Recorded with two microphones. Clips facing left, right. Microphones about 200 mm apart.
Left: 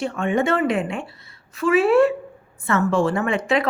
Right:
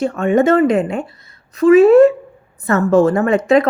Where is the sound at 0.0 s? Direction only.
40° right (ahead or behind).